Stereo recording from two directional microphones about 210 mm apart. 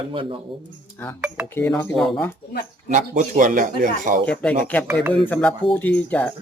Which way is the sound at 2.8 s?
35° right (ahead or behind).